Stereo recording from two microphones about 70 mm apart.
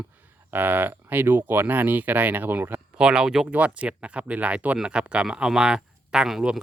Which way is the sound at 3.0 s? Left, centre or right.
Centre.